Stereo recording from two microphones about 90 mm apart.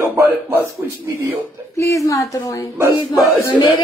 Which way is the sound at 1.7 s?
35° left (ahead or behind).